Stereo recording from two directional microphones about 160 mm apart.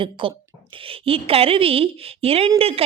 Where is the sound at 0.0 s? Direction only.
35° right (ahead or behind).